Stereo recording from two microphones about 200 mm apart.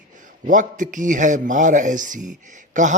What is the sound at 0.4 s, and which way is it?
Speech, 40° right (ahead or behind).